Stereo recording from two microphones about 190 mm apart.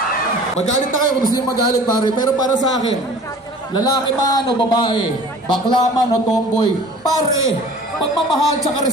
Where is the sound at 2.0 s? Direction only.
20° left (ahead or behind).